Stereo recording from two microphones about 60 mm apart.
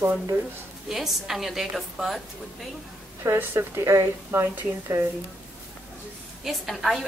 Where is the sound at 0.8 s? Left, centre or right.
Centre.